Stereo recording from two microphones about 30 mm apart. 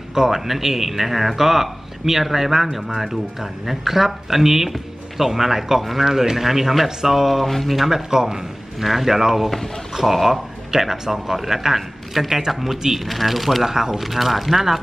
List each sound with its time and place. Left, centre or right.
0.1 s speech: centre
7.4 s speech: centre
7.9 s speech: centre
8.8 s speech: centre
10.7 s speech: centre
13.7 s speech: centre
13.9 s speech: centre